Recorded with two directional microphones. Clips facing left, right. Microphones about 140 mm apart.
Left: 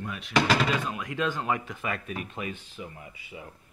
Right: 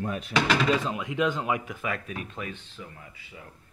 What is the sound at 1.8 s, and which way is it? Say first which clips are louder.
Speech: even; 5° left (ahead or behind).